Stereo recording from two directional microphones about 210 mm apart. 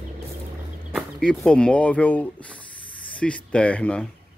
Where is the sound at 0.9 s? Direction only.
5° left (ahead or behind).